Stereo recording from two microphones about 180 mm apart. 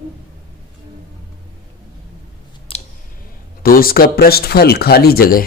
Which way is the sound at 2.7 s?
30° left (ahead or behind).